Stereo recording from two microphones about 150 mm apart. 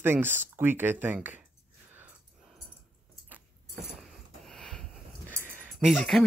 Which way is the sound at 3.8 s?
Centre (ahead or behind).